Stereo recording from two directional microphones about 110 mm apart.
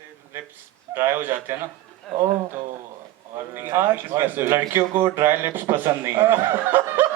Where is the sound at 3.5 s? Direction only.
20° right (ahead or behind).